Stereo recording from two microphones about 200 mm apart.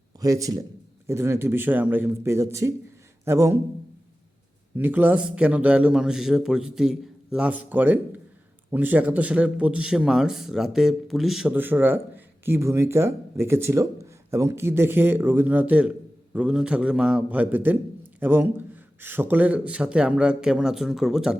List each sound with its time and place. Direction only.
0.2 s a man's voice: 15° right (ahead or behind)
4.8 s a man's voice: 10° right (ahead or behind)